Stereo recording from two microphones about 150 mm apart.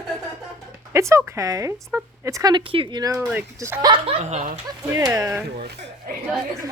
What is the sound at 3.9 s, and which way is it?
Speech, 40° right (ahead or behind).